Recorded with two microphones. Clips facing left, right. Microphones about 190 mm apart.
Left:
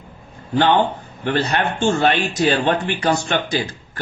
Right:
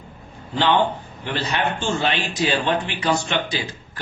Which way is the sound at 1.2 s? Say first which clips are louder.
Left 4 dB; 50° left (ahead or behind).